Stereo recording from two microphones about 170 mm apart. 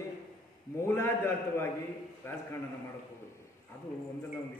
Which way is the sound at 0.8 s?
15° left (ahead or behind).